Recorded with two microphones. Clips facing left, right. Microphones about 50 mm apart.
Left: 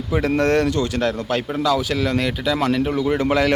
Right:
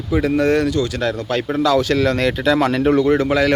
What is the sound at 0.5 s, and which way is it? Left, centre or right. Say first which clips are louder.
Speech: right 1 dB; left.